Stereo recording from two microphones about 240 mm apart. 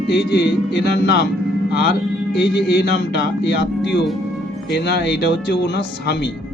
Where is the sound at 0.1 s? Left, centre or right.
Left.